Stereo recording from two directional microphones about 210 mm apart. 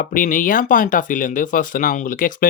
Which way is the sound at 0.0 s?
40° left (ahead or behind).